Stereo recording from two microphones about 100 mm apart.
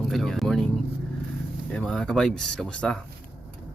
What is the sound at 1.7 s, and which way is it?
Speech, 10° left (ahead or behind).